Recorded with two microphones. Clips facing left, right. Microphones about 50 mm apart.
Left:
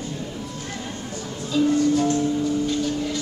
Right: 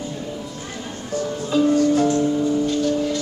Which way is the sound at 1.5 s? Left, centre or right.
Centre.